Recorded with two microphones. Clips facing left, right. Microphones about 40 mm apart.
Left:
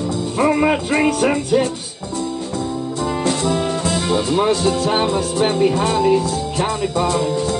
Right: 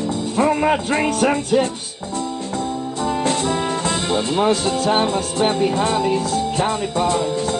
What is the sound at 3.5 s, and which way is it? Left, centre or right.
Brass instrument, centre.